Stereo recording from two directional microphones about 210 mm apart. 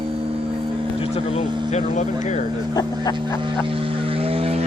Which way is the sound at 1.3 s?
30° left (ahead or behind).